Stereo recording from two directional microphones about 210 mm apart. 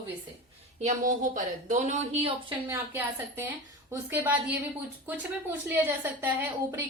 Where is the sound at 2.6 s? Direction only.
10° right (ahead or behind).